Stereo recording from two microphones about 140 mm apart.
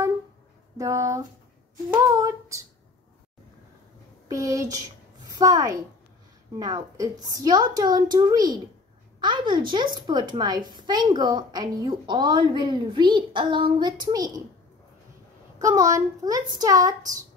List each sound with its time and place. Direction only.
0.7 s a woman's voice: 25° right (ahead or behind)
2.0 s a sound: 25° right (ahead or behind)
4.3 s a woman's voice: 25° right (ahead or behind)
15.6 s a woman's voice: 25° right (ahead or behind)